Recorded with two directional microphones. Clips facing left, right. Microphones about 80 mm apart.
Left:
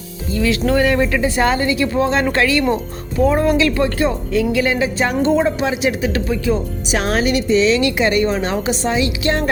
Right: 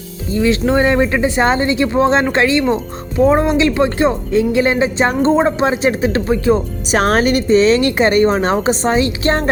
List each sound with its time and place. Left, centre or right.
0.3 s speech: right